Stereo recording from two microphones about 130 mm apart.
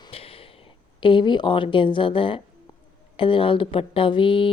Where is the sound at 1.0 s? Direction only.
40° left (ahead or behind).